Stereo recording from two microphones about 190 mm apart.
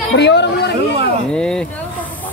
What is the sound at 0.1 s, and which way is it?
Speech, 65° left (ahead or behind).